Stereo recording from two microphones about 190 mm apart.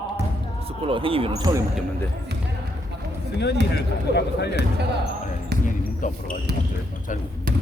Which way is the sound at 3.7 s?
60° left (ahead or behind).